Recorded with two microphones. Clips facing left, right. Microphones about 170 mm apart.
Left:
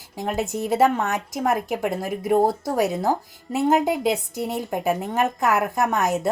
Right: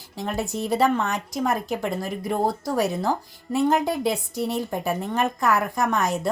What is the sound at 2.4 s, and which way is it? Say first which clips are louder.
A woman's voice: left 2 dB; 20° left (ahead or behind).